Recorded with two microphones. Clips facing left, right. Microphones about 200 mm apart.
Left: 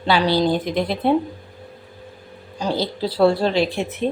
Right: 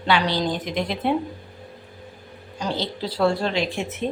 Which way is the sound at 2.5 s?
35° left (ahead or behind).